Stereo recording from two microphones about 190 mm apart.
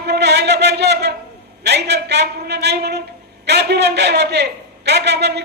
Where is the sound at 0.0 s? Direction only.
60° right (ahead or behind).